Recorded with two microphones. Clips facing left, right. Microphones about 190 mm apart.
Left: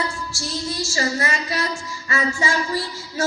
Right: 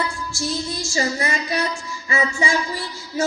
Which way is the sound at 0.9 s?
15° right (ahead or behind).